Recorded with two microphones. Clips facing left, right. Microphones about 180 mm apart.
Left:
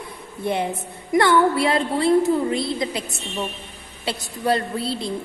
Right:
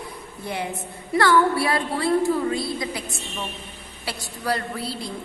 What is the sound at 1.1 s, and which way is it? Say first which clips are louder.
A woman's voice: left 2 dB; 20° left (ahead or behind).